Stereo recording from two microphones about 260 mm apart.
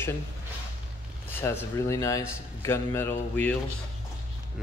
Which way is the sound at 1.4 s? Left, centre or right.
Centre.